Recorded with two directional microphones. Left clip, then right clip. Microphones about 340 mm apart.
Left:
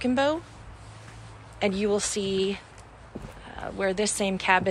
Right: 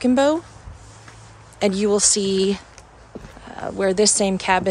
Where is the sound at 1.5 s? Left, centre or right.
Centre.